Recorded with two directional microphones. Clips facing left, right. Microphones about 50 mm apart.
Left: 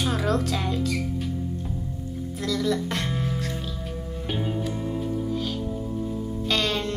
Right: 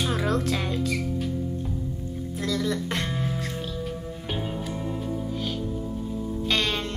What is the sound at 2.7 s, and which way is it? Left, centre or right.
Speech, right.